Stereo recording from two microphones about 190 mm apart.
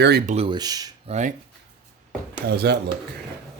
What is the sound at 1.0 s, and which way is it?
Speech, 35° right (ahead or behind).